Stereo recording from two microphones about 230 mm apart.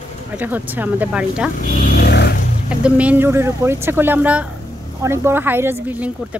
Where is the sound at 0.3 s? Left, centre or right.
Centre.